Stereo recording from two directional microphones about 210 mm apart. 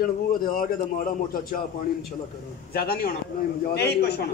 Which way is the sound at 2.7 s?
45° left (ahead or behind).